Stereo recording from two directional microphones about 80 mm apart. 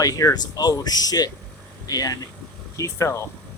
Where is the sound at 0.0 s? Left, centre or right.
Left.